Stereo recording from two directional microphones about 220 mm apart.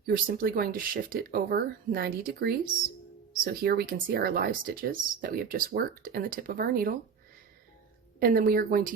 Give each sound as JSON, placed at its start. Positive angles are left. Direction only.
{"t": 0.0, "sound": "speech", "side_deg": -40}
{"t": 8.2, "sound": "speech", "side_deg": -40}